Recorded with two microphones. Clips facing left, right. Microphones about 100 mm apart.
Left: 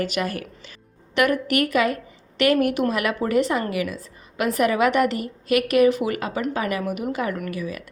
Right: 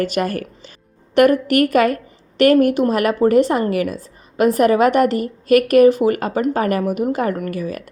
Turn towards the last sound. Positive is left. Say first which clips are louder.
# right 5 dB
turn(degrees=-45)  # may be behind; listen again after turning